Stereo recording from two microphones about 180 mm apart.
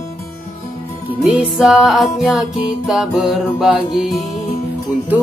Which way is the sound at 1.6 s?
Centre (ahead or behind).